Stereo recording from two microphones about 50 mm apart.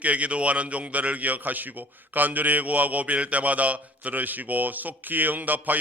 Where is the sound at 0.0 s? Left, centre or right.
Right.